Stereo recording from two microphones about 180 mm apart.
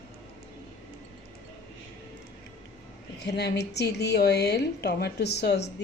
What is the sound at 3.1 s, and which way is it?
A woman's voice, 70° left (ahead or behind).